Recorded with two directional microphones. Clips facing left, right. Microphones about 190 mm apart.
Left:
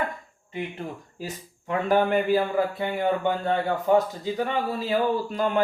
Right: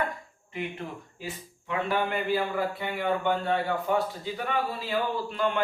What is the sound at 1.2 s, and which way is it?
Speech, 40° left (ahead or behind).